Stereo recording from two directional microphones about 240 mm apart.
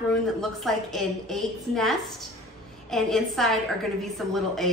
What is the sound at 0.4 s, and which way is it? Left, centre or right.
A woman's voice, centre.